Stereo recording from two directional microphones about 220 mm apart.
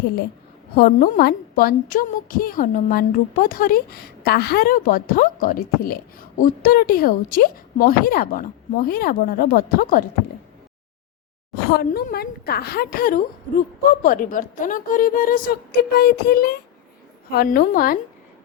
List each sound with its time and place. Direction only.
0.8 s a woman's voice: 40° left (ahead or behind)
11.5 s a woman's voice: 45° left (ahead or behind)